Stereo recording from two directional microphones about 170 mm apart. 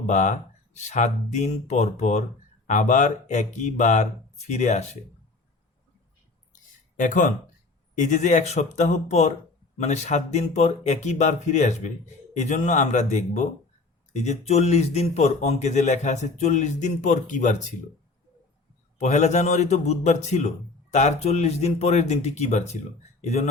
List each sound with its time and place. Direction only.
0.1 s speech: 45° left (ahead or behind)
6.5 s a sound: 50° left (ahead or behind)
7.9 s speech: 45° left (ahead or behind)
18.9 s speech: 45° left (ahead or behind)